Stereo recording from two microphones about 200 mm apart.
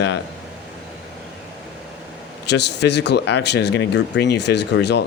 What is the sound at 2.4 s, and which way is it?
Speech, 60° left (ahead or behind).